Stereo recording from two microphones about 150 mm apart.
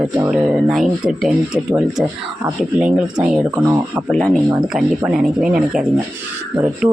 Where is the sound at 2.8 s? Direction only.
5° right (ahead or behind).